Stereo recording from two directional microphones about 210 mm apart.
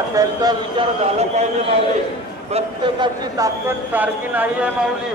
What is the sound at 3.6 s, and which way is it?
Speech, 10° right (ahead or behind).